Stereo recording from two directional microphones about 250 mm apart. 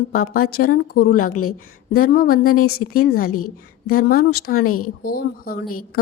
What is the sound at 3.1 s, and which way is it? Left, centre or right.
Speech, left.